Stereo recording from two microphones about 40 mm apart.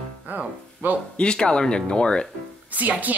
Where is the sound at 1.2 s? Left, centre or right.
Left.